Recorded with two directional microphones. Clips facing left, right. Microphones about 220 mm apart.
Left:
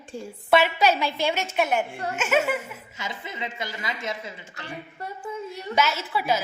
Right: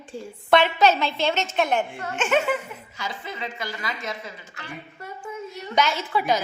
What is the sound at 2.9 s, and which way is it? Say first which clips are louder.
A woman's voice: right 2 dB; 20° left (ahead or behind).